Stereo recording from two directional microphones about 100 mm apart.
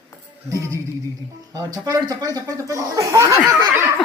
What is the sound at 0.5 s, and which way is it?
Speech, 30° right (ahead or behind).